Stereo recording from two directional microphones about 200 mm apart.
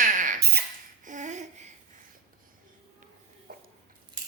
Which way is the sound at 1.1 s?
40° right (ahead or behind).